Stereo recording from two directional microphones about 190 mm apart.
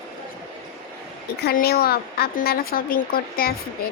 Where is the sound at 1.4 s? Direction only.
55° left (ahead or behind).